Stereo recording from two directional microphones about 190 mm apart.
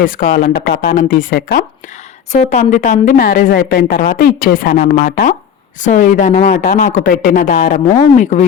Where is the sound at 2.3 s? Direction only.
40° left (ahead or behind).